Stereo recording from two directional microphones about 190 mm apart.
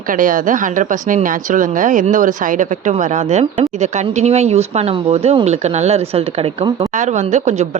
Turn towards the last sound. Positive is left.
turn(degrees=-35)  # may be behind; listen again after turning